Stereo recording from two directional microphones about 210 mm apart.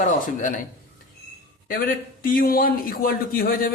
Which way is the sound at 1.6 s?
40° left (ahead or behind).